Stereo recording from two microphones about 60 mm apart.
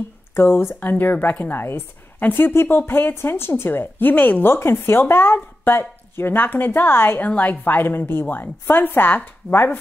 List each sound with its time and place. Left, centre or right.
0.4 s a woman's voice: left
7.2 s a woman's voice: left